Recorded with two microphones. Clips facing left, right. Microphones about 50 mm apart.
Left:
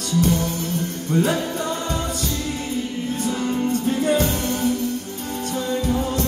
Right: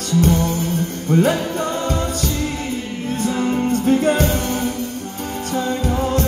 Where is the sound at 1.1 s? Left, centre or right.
Right.